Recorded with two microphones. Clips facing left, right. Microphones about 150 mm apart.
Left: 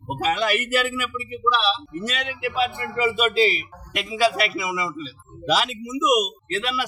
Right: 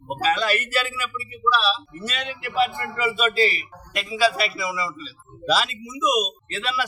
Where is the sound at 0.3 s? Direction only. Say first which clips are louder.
Left 1 dB; 20° left (ahead or behind).